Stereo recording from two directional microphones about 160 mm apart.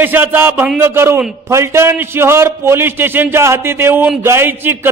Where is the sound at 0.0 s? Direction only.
10° right (ahead or behind).